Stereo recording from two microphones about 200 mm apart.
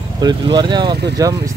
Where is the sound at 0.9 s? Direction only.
55° right (ahead or behind).